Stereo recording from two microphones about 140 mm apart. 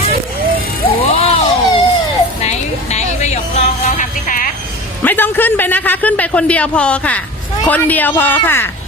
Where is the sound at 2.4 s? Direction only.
55° left (ahead or behind).